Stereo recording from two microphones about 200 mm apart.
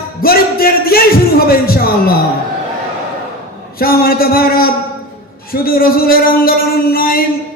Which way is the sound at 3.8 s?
45° left (ahead or behind).